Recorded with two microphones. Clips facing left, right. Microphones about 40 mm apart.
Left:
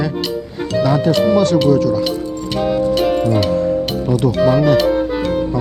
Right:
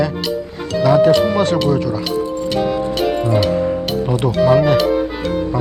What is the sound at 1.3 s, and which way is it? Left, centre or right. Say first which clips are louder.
Speech: left 3 dB; right.